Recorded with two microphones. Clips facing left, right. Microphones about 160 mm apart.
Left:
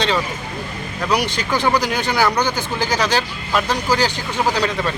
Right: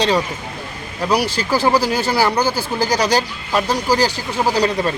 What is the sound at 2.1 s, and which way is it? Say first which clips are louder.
Speech: even; 30° right (ahead or behind).